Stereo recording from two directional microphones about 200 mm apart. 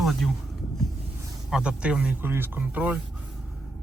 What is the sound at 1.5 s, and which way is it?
Speech, 5° right (ahead or behind).